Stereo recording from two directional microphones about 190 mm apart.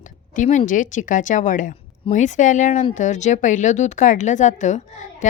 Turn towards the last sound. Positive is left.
turn(degrees=40)  # may be behind; listen again after turning